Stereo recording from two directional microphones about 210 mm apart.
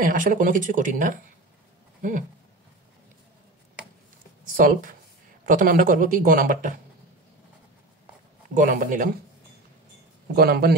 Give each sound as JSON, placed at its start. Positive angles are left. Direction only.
{"t": 0.0, "sound": "speech", "side_deg": -40}
{"t": 2.0, "sound": "a sound", "side_deg": -40}
{"t": 4.5, "sound": "speech", "side_deg": -40}
{"t": 8.5, "sound": "speech", "side_deg": -40}
{"t": 10.3, "sound": "a man's voice", "side_deg": -45}